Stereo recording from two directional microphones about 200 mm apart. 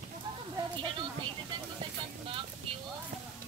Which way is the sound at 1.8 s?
25° right (ahead or behind).